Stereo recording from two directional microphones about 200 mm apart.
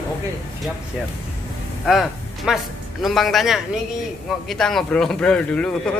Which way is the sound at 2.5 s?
5° right (ahead or behind).